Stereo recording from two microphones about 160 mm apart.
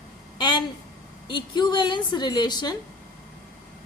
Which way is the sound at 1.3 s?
30° left (ahead or behind).